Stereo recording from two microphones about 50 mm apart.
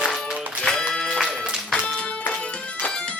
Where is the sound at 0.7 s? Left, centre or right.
Centre.